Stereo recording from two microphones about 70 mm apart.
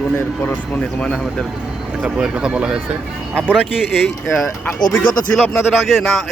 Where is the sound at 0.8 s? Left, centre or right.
Centre.